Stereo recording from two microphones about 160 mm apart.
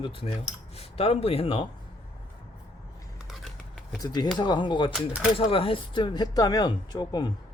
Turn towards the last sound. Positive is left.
turn(degrees=25)  # may be behind; listen again after turning